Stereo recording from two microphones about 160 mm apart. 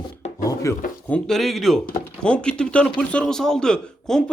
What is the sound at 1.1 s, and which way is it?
A man's voice, 5° left (ahead or behind).